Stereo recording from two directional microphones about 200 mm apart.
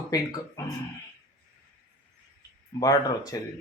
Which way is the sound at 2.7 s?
20° left (ahead or behind).